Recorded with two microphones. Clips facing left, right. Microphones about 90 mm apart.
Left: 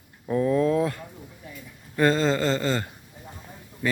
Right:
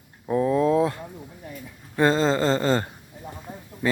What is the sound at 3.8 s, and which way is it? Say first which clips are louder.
Speech: right 3 dB; 25° right (ahead or behind).